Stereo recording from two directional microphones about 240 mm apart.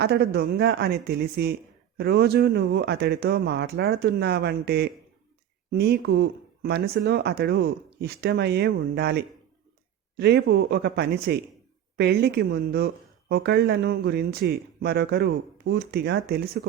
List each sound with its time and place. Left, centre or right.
0.0 s a man's voice: right